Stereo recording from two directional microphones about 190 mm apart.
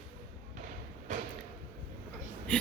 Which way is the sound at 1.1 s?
40° right (ahead or behind).